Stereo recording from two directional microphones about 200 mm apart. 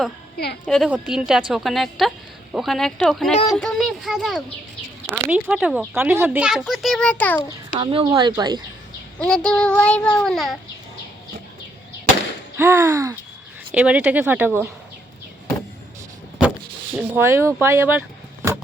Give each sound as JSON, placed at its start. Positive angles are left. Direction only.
{"t": 0.3, "sound": "a woman's voice", "side_deg": 55}
{"t": 0.6, "sound": "a child's voice", "side_deg": 0}
{"t": 7.8, "sound": "speech", "side_deg": -20}
{"t": 9.1, "sound": "a child's voice", "side_deg": 5}
{"t": 12.5, "sound": "speech", "side_deg": -15}
{"t": 16.9, "sound": "speech", "side_deg": -10}